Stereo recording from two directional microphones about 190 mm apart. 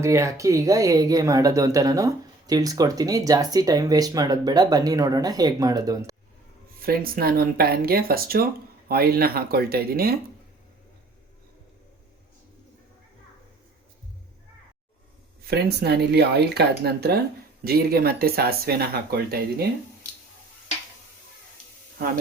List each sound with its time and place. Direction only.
0.0 s speech: 15° right (ahead or behind)
6.7 s speech: 50° right (ahead or behind)
15.4 s speech: 60° right (ahead or behind)
21.9 s speech: 55° right (ahead or behind)